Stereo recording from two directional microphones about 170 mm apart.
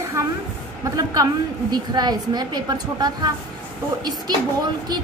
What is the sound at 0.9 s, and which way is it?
A woman's voice, 20° right (ahead or behind).